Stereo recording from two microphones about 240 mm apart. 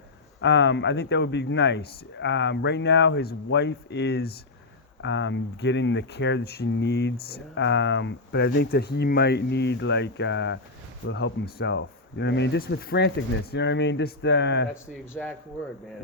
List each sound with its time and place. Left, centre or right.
0.4 s speech: left